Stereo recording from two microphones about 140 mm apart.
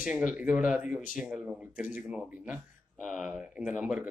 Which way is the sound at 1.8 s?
70° left (ahead or behind).